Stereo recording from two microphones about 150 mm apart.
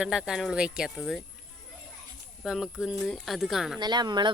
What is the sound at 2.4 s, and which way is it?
Speech, 5° right (ahead or behind).